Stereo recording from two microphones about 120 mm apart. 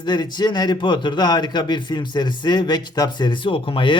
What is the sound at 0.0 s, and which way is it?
A man's voice, 35° left (ahead or behind).